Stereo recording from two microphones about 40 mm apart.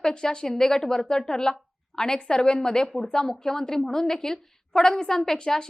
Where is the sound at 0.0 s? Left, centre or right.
Centre.